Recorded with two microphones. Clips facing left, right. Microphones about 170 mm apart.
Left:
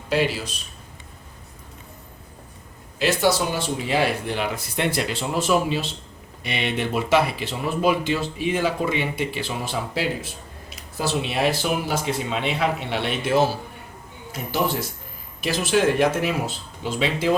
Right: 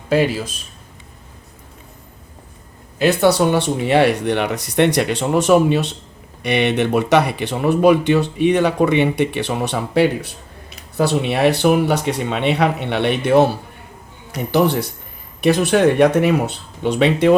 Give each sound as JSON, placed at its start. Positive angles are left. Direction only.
{"t": 0.1, "sound": "a man's voice", "side_deg": -50}
{"t": 3.0, "sound": "speech", "side_deg": -60}